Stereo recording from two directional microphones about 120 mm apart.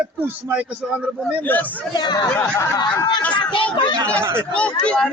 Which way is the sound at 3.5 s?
40° left (ahead or behind).